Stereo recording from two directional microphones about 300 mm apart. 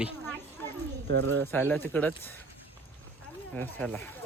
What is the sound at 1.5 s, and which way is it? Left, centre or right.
Speech, centre.